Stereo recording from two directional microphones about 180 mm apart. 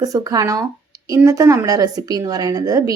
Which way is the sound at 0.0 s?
20° right (ahead or behind).